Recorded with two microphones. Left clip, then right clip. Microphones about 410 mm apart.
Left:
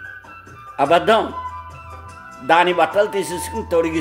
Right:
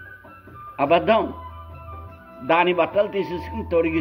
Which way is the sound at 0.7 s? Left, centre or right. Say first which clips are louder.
Left 3 dB; centre.